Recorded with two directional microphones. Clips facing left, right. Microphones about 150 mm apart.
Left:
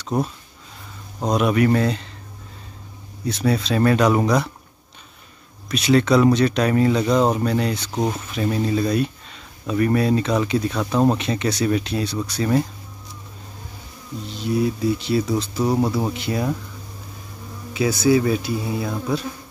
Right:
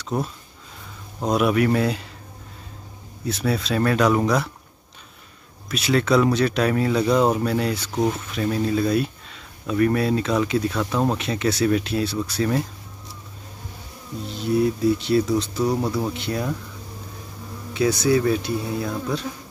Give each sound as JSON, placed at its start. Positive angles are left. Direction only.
{"t": 0.1, "sound": "speech", "side_deg": 0}
{"t": 3.3, "sound": "speech", "side_deg": 0}
{"t": 5.7, "sound": "speech", "side_deg": 0}
{"t": 7.9, "sound": "speech", "side_deg": 15}
{"t": 8.5, "sound": "speech", "side_deg": 5}
{"t": 14.2, "sound": "speech", "side_deg": 0}
{"t": 17.7, "sound": "speech", "side_deg": 0}